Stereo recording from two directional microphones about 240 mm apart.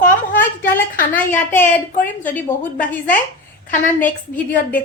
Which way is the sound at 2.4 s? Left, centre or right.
Left.